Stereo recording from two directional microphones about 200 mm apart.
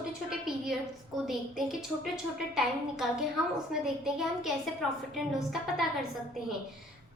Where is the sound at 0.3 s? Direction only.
5° right (ahead or behind).